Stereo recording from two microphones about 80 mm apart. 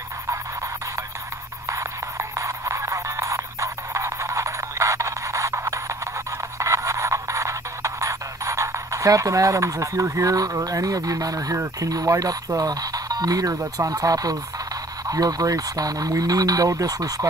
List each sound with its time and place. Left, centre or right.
1.7 s music: right
11.5 s speech: right